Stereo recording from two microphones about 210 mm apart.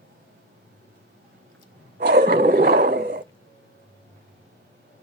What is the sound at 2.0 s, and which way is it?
Roar, 45° right (ahead or behind).